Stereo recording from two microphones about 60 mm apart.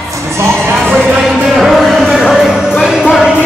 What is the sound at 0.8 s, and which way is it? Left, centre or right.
Music, centre.